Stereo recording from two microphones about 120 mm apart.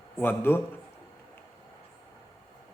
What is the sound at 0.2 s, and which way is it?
Speech, 20° left (ahead or behind).